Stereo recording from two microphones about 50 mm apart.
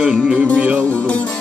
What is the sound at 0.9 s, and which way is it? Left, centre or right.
Music, left.